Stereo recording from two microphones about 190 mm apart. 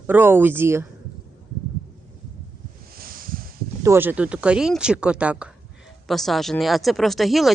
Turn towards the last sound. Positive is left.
turn(degrees=0)  # may be behind; listen again after turning